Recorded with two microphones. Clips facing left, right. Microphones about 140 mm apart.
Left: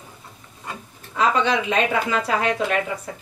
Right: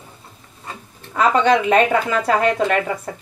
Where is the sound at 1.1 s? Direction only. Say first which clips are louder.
Right 5 dB; 55° right (ahead or behind).